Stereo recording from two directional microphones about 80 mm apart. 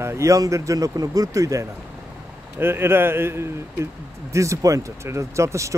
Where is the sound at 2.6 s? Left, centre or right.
Right.